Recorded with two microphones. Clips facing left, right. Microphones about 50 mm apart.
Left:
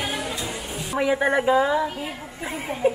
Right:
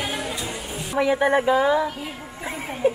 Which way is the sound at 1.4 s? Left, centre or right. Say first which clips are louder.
Right 1 dB; centre.